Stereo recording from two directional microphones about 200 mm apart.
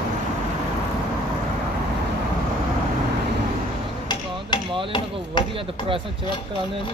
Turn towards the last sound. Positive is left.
turn(degrees=25)  # may be behind; listen again after turning